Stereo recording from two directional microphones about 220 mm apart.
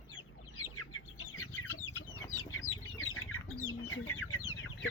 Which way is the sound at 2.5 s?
65° left (ahead or behind).